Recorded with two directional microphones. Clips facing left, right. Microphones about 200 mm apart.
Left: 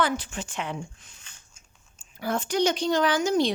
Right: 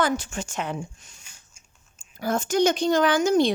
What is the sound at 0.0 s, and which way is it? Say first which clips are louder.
Speech: right 2 dB; 45° right (ahead or behind).